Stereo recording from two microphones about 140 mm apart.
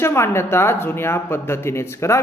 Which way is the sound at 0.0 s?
15° left (ahead or behind).